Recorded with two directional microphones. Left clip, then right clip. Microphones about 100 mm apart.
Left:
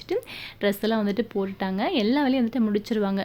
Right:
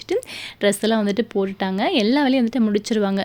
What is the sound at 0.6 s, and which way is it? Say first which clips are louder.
A woman's voice: right 5 dB; 35° right (ahead or behind).